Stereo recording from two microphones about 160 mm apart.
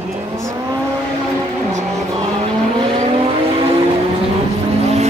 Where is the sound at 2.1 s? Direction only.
30° right (ahead or behind).